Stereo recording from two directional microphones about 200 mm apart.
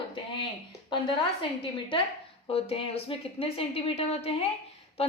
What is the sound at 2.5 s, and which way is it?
A woman's voice, 30° left (ahead or behind).